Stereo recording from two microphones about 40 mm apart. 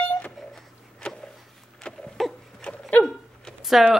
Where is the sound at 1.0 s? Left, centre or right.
Left.